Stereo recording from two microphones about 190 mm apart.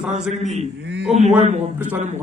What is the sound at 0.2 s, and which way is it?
Speech, centre (ahead or behind).